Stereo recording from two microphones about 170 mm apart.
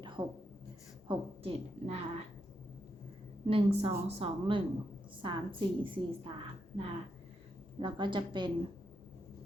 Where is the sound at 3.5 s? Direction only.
35° right (ahead or behind).